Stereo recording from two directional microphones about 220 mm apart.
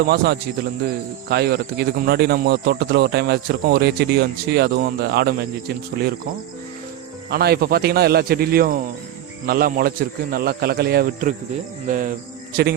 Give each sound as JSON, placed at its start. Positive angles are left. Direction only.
{"t": 0.0, "sound": "speech", "side_deg": -45}
{"t": 7.3, "sound": "speech", "side_deg": -45}
{"t": 11.9, "sound": "cricket", "side_deg": -35}